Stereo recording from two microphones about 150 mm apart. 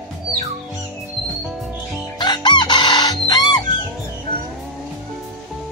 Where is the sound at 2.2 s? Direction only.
30° left (ahead or behind).